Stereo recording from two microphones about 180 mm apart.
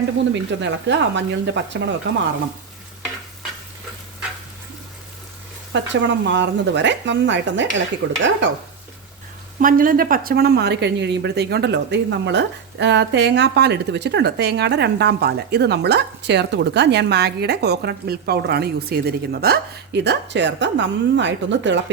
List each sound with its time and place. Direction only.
0.3 s speech: 80° right
5.7 s speech: 85° right
9.6 s speech: 50° right (ahead or behind); by 21.9 s 85° right